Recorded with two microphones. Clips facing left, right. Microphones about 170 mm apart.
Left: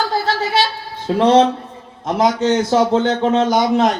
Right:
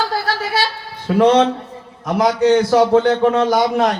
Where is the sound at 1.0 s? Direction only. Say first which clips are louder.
Even; 35° left (ahead or behind).